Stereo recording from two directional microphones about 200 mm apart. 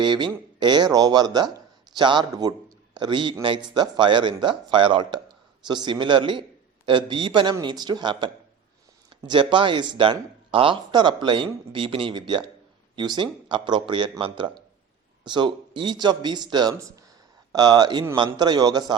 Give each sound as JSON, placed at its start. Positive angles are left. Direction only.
{"t": 0.0, "sound": "speech", "side_deg": -20}